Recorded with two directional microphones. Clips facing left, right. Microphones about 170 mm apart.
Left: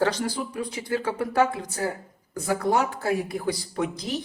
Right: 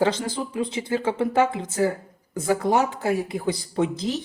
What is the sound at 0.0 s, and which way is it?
Speech, 20° right (ahead or behind).